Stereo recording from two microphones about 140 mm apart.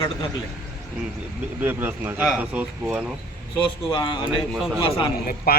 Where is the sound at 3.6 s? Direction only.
35° left (ahead or behind).